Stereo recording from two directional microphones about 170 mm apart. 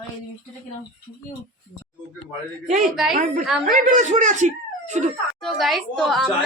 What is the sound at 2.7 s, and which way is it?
Speech, centre (ahead or behind).